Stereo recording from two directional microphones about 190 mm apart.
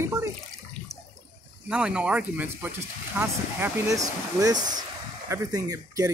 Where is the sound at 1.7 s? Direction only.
5° right (ahead or behind).